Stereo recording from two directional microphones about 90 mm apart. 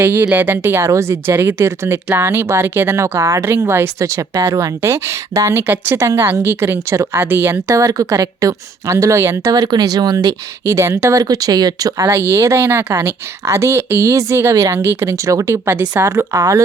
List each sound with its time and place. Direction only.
0.0 s speech: 25° right (ahead or behind)
7.7 s speech: 40° right (ahead or behind)